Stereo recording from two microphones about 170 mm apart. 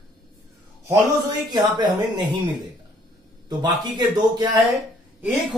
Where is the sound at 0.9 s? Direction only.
25° right (ahead or behind).